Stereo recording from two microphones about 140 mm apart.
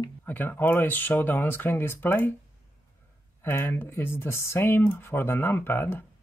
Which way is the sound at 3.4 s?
15° left (ahead or behind).